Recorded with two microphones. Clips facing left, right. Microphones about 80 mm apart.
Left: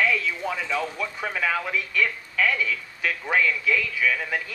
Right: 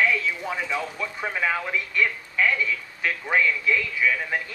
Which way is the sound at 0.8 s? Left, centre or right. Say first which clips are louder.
Left 1 dB; centre.